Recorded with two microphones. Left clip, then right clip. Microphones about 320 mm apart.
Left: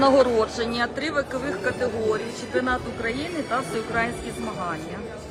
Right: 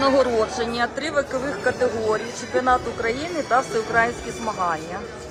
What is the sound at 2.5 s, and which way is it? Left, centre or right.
A woman's voice, centre.